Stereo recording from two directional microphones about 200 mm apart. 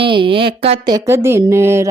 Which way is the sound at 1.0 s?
15° right (ahead or behind).